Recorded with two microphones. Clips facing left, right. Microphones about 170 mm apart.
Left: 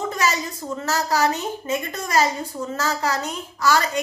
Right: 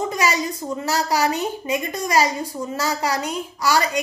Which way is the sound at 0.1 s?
15° right (ahead or behind).